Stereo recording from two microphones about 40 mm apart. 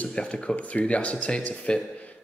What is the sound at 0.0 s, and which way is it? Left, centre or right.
A man's voice, left.